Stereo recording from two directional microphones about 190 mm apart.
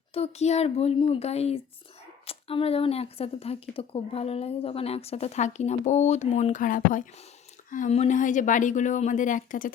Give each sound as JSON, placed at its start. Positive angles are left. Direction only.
{"t": 0.1, "sound": "speech", "side_deg": 35}